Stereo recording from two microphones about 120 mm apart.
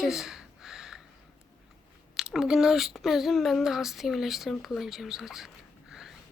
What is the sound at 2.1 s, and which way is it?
Speech, 5° right (ahead or behind).